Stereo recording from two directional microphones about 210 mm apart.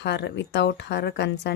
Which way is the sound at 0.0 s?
55° left (ahead or behind).